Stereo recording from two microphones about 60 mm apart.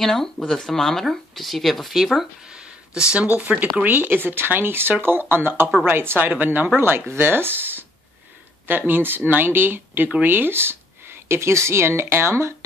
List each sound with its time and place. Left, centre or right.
0.0 s speech: centre
2.4 s a sound: centre
3.3 s speech: right